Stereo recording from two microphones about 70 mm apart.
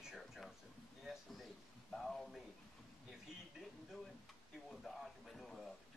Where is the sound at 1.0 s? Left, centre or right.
Centre.